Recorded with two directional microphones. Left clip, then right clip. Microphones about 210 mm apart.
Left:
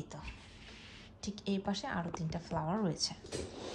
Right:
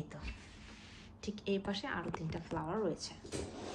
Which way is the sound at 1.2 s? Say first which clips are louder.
Right 1 dB; 25° left (ahead or behind).